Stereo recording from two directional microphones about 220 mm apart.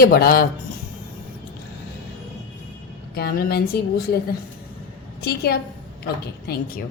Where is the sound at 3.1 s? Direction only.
45° left (ahead or behind).